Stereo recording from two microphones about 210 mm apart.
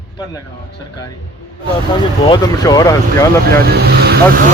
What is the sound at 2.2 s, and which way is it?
Speech, 20° left (ahead or behind).